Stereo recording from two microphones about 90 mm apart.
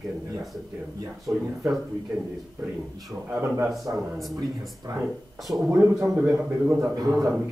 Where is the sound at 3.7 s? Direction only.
Centre (ahead or behind).